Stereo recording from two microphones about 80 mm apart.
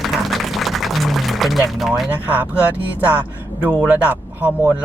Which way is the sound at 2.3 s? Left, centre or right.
Right.